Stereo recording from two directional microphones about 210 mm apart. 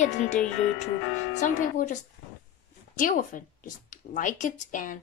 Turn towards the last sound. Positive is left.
turn(degrees=40)  # may be behind; listen again after turning